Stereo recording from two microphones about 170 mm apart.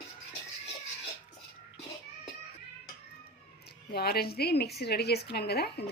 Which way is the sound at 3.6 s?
70° left (ahead or behind).